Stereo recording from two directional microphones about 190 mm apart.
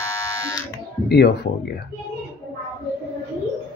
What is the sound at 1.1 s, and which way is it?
Speech, 60° left (ahead or behind).